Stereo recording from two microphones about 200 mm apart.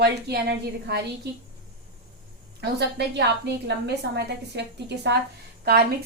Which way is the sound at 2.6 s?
60° right (ahead or behind).